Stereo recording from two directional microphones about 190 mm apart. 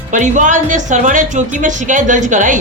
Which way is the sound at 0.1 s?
40° right (ahead or behind).